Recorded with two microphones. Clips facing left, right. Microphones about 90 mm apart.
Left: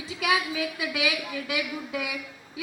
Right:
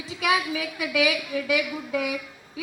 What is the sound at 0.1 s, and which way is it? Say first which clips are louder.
Speech: right 2 dB; 35° right (ahead or behind).